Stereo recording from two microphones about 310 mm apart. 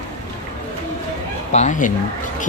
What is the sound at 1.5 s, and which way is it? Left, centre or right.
Speech, left.